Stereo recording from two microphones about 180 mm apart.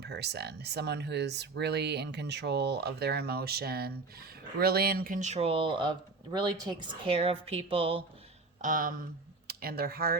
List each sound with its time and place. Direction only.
0.0 s speech: 65° right (ahead or behind); by 8.0 s 30° right (ahead or behind)
8.6 s speech: 50° right (ahead or behind)